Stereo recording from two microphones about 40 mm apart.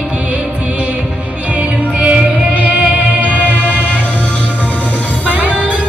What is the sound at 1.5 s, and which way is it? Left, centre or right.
Music, right.